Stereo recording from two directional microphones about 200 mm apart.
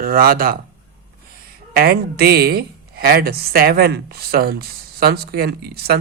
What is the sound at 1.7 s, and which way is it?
A woman's voice, 50° right (ahead or behind).